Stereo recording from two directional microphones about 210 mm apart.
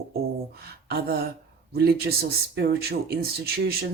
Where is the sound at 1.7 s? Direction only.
50° right (ahead or behind).